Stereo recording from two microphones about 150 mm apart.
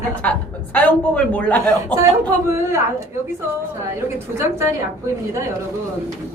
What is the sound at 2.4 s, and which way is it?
Speech, 15° right (ahead or behind).